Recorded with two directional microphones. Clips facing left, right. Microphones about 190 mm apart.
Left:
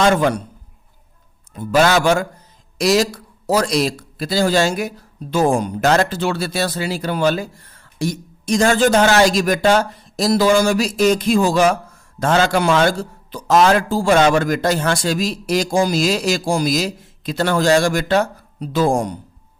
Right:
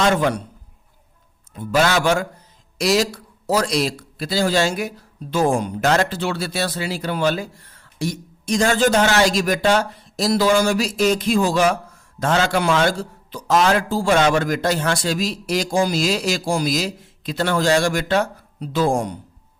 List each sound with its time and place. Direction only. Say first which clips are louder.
0.0 s a man's voice: left 3 dB; 45° left (ahead or behind)
1.5 s a man's voice: left 3 dB; 45° left (ahead or behind)